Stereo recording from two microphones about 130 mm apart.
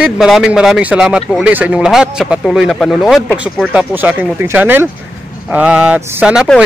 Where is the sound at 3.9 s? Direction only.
15° right (ahead or behind).